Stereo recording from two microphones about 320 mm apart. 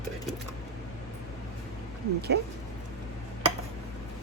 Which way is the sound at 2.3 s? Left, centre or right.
Right.